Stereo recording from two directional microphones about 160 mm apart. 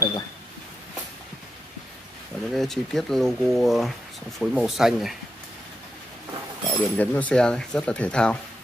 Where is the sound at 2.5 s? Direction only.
Centre (ahead or behind).